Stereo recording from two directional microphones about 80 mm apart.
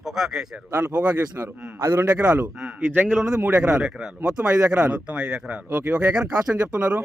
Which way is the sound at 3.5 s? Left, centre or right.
Right.